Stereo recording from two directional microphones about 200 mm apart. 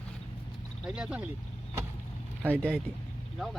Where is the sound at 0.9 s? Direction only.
5° right (ahead or behind).